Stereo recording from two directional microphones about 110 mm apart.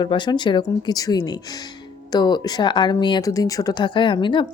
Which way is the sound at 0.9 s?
35° left (ahead or behind).